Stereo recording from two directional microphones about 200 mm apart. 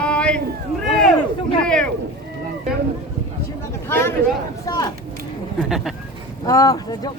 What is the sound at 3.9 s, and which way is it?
A man's voice, 10° left (ahead or behind).